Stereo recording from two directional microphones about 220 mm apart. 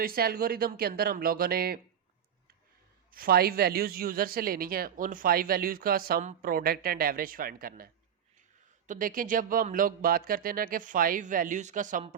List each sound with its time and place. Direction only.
0.0 s speech: 45° right (ahead or behind)
3.1 s speech: 40° right (ahead or behind)
8.9 s speech: 40° right (ahead or behind)